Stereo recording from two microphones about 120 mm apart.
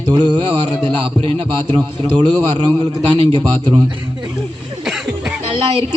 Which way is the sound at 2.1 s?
10° left (ahead or behind).